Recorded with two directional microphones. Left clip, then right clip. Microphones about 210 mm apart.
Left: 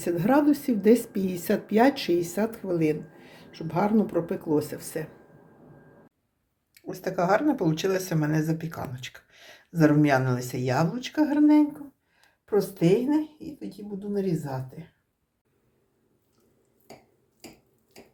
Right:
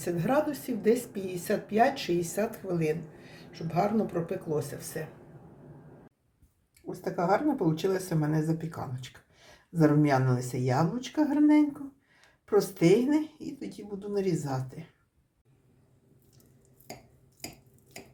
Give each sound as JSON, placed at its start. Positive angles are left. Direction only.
{"t": 0.0, "sound": "speech", "side_deg": 35}
{"t": 6.8, "sound": "speech", "side_deg": -5}